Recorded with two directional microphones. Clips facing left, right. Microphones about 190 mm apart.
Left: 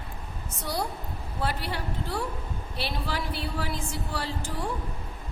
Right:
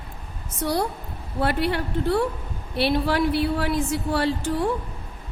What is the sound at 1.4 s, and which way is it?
A woman's voice, 65° right (ahead or behind).